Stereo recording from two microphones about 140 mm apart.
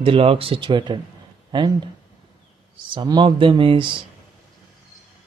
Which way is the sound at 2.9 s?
35° right (ahead or behind).